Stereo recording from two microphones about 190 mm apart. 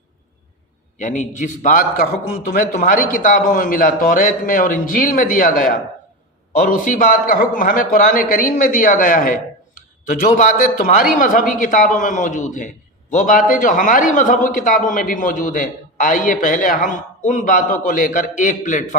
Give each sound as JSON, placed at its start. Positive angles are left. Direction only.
{"t": 0.9, "sound": "a man's voice", "side_deg": 40}